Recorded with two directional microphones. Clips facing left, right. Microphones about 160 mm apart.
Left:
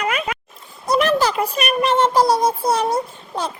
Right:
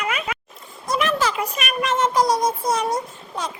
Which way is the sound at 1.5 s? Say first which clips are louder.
Left 7 dB; 35° left (ahead or behind).